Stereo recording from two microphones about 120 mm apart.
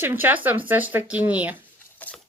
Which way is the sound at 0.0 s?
20° right (ahead or behind).